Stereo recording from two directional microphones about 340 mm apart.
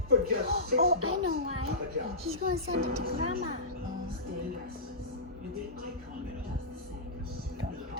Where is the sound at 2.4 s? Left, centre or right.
Right.